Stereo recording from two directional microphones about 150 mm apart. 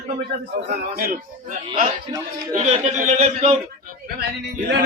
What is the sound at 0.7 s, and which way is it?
Speech, 80° right.